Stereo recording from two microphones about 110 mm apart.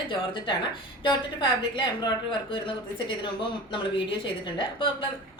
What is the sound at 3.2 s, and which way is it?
A woman's voice, 50° left (ahead or behind).